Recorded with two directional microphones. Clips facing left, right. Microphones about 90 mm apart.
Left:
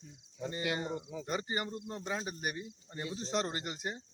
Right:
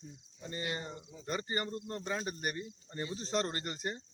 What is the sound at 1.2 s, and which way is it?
Speech, 10° left (ahead or behind).